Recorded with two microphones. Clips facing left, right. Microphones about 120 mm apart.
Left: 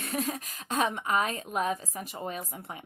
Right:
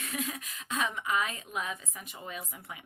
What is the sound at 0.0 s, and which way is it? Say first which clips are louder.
Speech: left 5 dB; 35° left (ahead or behind).